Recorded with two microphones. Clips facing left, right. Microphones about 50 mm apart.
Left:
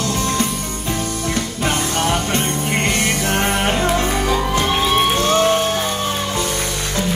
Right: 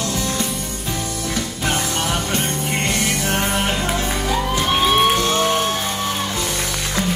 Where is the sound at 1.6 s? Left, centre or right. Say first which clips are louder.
Left 3 dB; left.